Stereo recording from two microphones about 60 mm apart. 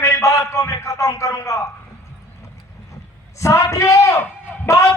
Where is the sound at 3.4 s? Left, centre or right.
Left.